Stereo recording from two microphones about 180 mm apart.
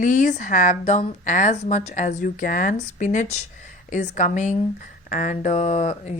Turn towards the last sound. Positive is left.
turn(degrees=40)  # may be behind; listen again after turning